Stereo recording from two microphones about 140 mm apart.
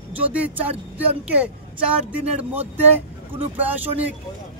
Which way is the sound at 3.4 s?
10° right (ahead or behind).